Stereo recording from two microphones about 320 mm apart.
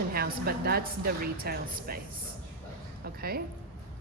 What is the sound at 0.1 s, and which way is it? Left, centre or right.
A woman's voice, right.